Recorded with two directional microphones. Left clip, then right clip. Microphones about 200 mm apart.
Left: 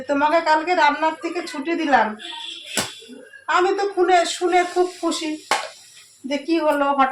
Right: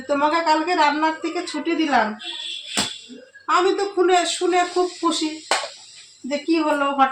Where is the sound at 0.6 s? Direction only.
25° left (ahead or behind).